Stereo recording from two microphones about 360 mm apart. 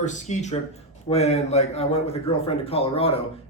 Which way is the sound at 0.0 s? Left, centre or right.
Centre.